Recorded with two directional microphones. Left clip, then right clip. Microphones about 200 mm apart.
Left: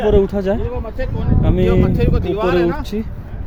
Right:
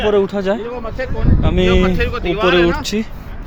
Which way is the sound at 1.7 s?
40° left (ahead or behind).